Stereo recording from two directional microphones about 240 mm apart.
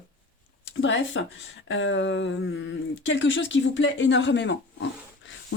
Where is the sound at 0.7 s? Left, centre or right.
Left.